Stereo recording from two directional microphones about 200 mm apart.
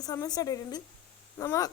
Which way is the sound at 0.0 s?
20° left (ahead or behind).